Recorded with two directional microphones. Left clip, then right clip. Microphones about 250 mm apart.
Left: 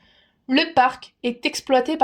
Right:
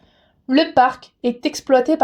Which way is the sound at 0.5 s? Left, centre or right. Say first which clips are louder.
Right 3 dB; left.